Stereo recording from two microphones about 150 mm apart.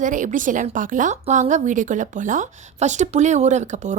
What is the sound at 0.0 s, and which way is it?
A woman's voice, 60° right (ahead or behind).